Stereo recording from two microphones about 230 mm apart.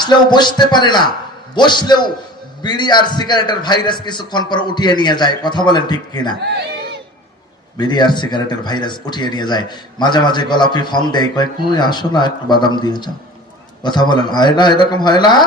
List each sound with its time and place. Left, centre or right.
0.0 s speech: centre
6.4 s a sound: right
7.8 s speech: centre